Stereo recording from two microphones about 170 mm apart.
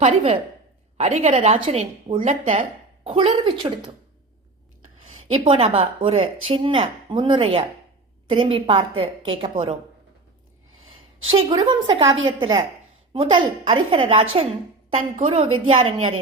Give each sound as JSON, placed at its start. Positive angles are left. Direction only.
{"t": 0.0, "sound": "a woman's voice", "side_deg": -35}
{"t": 5.0, "sound": "a woman's voice", "side_deg": -35}
{"t": 10.8, "sound": "a woman's voice", "side_deg": -30}
{"t": 14.9, "sound": "a woman's voice", "side_deg": -45}